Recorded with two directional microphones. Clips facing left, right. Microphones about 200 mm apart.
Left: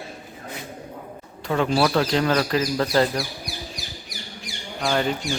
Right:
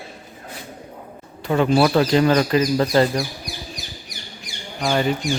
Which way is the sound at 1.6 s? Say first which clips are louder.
Right 4 dB; 5° right (ahead or behind).